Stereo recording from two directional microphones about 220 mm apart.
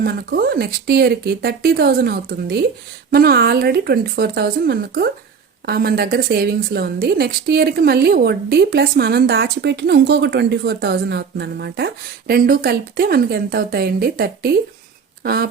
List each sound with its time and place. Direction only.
0.0 s a woman's voice: 45° right (ahead or behind)